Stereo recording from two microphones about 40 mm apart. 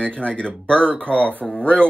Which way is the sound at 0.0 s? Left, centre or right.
Left.